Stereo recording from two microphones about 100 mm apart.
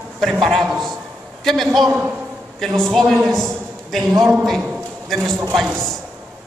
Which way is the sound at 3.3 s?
5° left (ahead or behind).